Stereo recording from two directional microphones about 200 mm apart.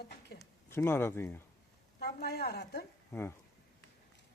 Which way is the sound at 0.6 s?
10° left (ahead or behind).